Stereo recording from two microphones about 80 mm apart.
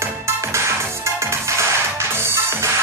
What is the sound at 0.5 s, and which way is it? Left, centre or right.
Music, right.